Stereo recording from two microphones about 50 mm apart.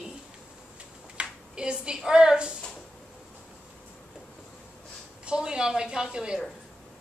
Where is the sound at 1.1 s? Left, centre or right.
Centre.